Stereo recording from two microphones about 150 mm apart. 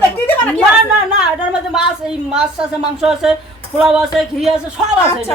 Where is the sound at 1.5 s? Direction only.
5° right (ahead or behind).